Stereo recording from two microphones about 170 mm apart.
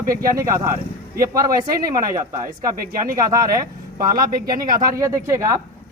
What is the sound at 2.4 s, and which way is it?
Speech, 60° right (ahead or behind).